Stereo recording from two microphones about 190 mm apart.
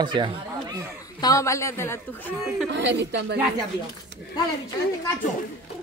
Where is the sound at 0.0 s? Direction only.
25° right (ahead or behind).